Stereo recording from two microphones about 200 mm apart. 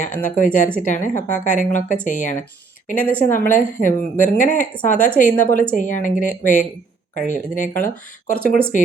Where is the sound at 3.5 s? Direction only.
40° left (ahead or behind).